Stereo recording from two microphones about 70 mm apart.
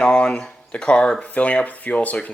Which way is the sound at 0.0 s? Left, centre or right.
Centre.